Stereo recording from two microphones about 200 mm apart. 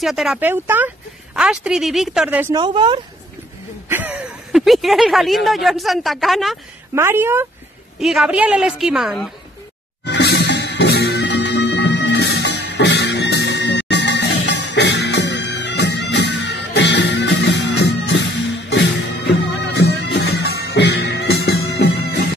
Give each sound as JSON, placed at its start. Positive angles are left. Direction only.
{"t": 0.0, "sound": "speech", "side_deg": 0}
{"t": 2.5, "sound": "a woman's voice", "side_deg": -25}
{"t": 3.9, "sound": "speech", "side_deg": -5}
{"t": 7.0, "sound": "speech", "side_deg": -10}
{"t": 10.0, "sound": "music", "side_deg": 60}